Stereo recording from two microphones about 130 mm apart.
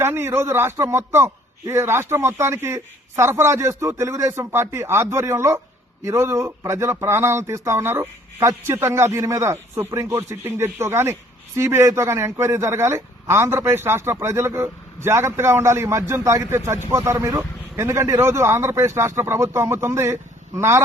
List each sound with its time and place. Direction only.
0.0 s speech: 15° right (ahead or behind)